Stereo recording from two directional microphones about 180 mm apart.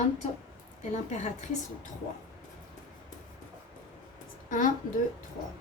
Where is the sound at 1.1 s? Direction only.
40° left (ahead or behind).